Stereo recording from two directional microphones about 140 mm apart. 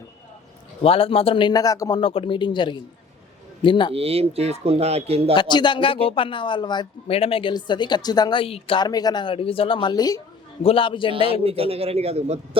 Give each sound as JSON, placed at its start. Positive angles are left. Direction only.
{"t": 0.8, "sound": "speech", "side_deg": 40}
{"t": 2.0, "sound": "speech", "side_deg": 40}
{"t": 3.9, "sound": "speech", "side_deg": -45}
{"t": 5.3, "sound": "speech", "side_deg": 30}
{"t": 7.1, "sound": "speech", "side_deg": 45}
{"t": 10.6, "sound": "speech", "side_deg": 40}
{"t": 11.4, "sound": "speech", "side_deg": -45}